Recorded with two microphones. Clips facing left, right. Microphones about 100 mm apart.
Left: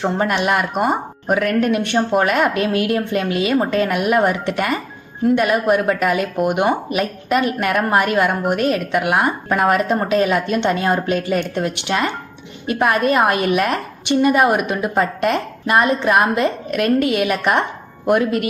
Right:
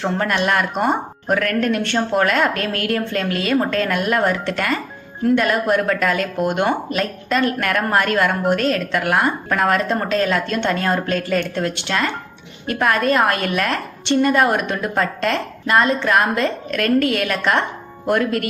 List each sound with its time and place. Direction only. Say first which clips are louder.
0.0 s speech: left 1 dB; 15° left (ahead or behind)